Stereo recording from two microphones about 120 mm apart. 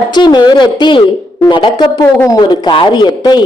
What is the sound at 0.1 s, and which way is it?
A man's voice, 40° left (ahead or behind).